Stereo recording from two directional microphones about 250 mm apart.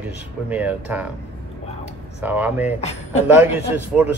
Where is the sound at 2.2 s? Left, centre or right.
Centre.